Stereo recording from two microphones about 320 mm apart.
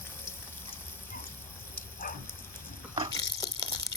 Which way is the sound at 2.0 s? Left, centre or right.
Left.